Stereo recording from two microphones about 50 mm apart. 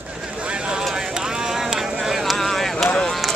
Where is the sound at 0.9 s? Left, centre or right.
Centre.